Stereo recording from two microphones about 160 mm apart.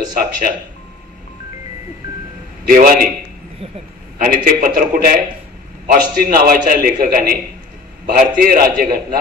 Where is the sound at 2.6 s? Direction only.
65° right (ahead or behind).